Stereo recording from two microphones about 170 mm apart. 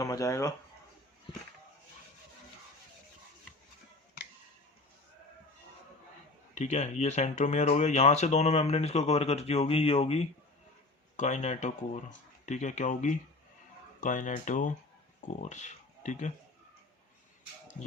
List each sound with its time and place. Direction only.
0.0 s speech: 20° left (ahead or behind)
6.5 s speech: 45° left (ahead or behind)